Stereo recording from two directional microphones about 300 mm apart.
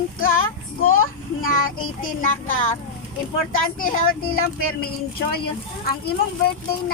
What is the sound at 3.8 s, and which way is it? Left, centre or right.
Speech, left.